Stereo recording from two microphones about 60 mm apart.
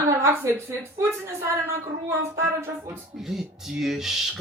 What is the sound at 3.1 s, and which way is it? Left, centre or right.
Speech, centre.